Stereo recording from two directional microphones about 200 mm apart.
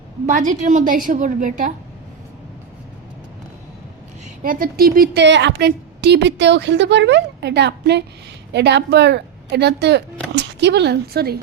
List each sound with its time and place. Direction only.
0.3 s a woman's voice: 40° right (ahead or behind)
4.4 s a woman's voice: 45° right (ahead or behind)